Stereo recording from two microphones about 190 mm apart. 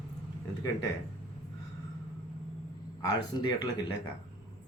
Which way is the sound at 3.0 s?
20° left (ahead or behind).